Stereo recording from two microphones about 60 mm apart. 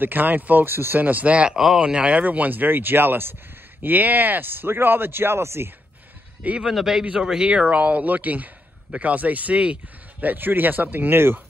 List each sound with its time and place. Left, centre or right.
0.0 s speech: right
1.0 s speech: right
6.4 s speech: centre
6.7 s speech: centre
7.5 s speech: right
10.2 s speech: right